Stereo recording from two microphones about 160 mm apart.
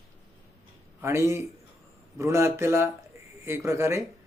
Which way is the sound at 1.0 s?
15° right (ahead or behind).